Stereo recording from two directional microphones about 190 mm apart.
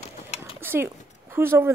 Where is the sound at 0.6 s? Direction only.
10° right (ahead or behind).